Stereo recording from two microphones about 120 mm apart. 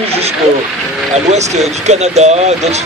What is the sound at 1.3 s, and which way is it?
Speech, 70° right (ahead or behind).